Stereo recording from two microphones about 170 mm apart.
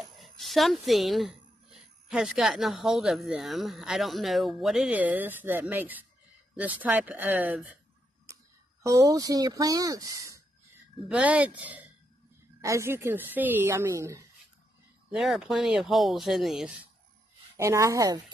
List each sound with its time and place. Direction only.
0.0 s speech: centre (ahead or behind)
8.8 s speech: 20° right (ahead or behind)
11.1 s speech: 5° right (ahead or behind)
15.0 s speech: centre (ahead or behind)
17.6 s speech: 20° right (ahead or behind)